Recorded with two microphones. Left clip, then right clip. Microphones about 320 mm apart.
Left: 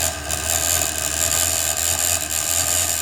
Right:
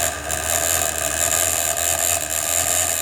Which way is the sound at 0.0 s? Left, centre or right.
Centre.